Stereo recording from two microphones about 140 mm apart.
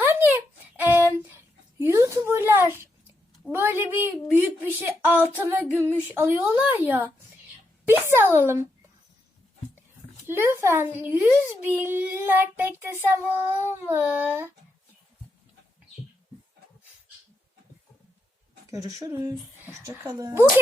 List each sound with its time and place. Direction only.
0.0 s a sound: 15° right (ahead or behind)
3.5 s a child's voice: 15° right (ahead or behind)
10.2 s a child's voice: 15° right (ahead or behind)
18.7 s speech: 25° right (ahead or behind)